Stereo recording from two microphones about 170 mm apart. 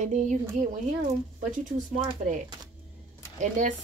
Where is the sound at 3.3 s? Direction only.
50° right (ahead or behind).